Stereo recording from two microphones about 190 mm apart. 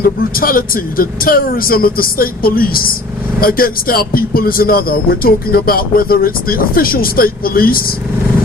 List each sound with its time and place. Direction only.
0.0 s a man's voice: 50° left (ahead or behind)